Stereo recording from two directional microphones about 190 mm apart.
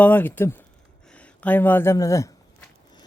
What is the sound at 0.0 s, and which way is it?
Speech, 10° left (ahead or behind).